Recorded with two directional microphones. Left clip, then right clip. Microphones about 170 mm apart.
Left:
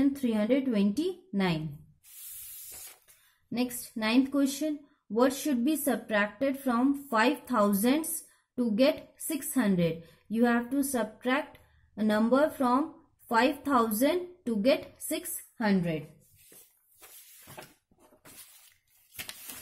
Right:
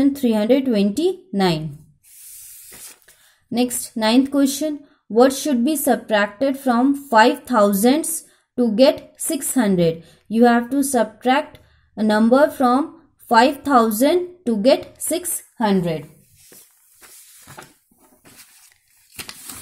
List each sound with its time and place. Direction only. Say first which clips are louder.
0.0 s a woman's voice: right 10 dB; 20° right (ahead or behind)
3.5 s speech: right 12 dB; 20° right (ahead or behind)